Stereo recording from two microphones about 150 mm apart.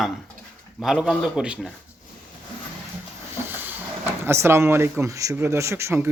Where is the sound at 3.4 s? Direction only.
15° right (ahead or behind).